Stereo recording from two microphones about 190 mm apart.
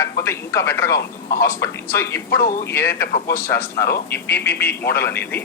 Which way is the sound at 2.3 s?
55° left (ahead or behind).